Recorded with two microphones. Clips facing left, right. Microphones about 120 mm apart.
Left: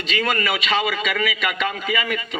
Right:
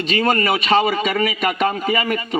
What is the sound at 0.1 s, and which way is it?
A man's voice, 40° right (ahead or behind).